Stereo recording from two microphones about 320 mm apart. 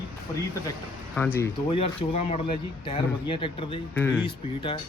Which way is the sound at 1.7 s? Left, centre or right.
Centre.